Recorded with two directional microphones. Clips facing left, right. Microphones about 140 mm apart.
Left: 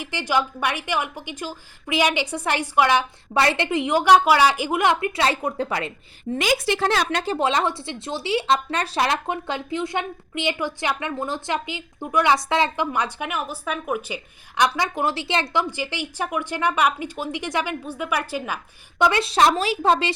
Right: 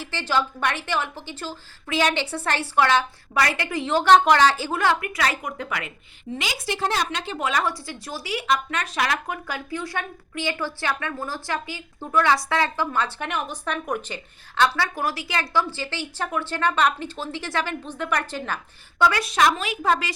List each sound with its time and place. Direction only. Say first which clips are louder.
0.0 s speech: left 1 dB; 15° left (ahead or behind)
3.3 s speech: left 4 dB; 25° left (ahead or behind)
6.3 s a woman's voice: left 9 dB; 50° left (ahead or behind)
6.7 s a woman's voice: left 4 dB; 75° left (ahead or behind)
7.3 s speech: left 1 dB; 25° left (ahead or behind)
14.8 s speech: left 2 dB; 25° left (ahead or behind)